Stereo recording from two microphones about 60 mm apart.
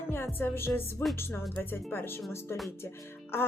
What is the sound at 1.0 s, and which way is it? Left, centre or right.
Speech, left.